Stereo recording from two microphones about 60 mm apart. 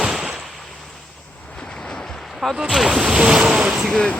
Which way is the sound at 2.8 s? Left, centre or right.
Centre.